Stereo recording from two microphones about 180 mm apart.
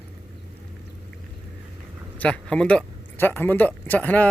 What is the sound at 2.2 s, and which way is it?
Speech, 5° left (ahead or behind).